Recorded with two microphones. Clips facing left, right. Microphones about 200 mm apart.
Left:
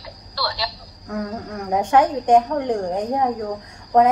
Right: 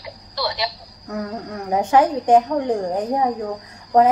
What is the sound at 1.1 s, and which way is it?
Speech, centre (ahead or behind).